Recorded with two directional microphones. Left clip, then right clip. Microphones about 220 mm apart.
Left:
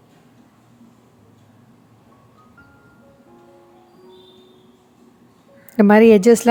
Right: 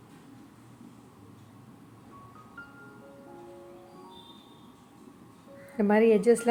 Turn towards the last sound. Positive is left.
turn(degrees=45)  # may be behind; listen again after turning